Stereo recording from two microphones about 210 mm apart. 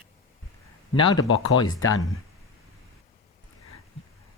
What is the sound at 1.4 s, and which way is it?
Speech, 20° left (ahead or behind).